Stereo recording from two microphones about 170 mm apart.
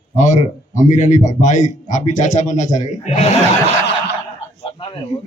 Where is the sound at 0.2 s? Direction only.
45° left (ahead or behind).